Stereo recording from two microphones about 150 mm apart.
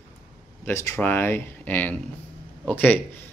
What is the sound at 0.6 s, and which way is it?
Speech, 15° left (ahead or behind).